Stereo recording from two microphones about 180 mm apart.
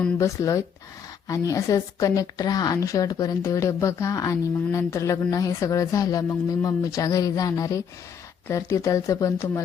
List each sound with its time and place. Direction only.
0.0 s a woman's voice: 15° left (ahead or behind)